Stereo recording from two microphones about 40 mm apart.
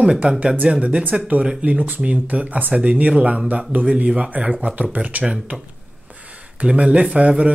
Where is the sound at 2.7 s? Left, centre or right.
Right.